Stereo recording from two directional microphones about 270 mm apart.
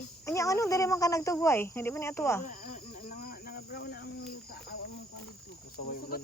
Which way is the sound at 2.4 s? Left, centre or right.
Left.